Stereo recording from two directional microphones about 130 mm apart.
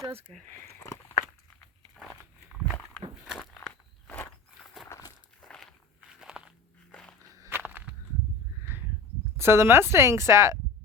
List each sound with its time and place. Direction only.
0.7 s a sound: 20° left (ahead or behind)
4.9 s walk: 25° left (ahead or behind)
5.4 s walk: 5° left (ahead or behind)
6.1 s biting: 5° right (ahead or behind)
7.3 s walk: 25° right (ahead or behind)
7.6 s a sound: 10° right (ahead or behind)
9.4 s a woman's voice: 20° right (ahead or behind)